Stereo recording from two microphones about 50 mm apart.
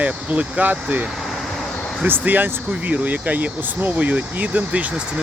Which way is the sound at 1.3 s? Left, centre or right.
Centre.